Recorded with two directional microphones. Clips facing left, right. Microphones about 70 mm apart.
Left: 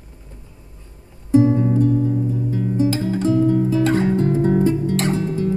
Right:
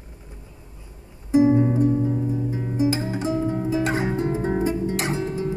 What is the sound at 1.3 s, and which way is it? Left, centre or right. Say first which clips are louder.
Music: left 2 dB; centre.